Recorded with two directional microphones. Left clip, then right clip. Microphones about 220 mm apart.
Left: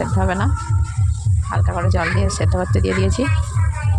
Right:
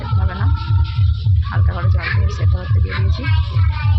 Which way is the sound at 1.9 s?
35° left (ahead or behind).